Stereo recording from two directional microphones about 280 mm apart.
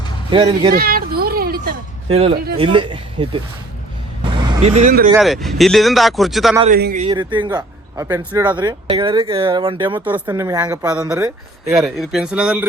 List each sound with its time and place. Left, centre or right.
0.3 s a man's voice: centre
0.7 s a sound: right
2.3 s a man's voice: right
2.6 s a man's voice: centre
4.2 s vehicle: right
5.1 s speech: centre
6.7 s a man's voice: right
10.0 s a man's voice: centre